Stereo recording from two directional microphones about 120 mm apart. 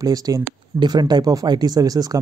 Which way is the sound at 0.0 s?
30° right (ahead or behind).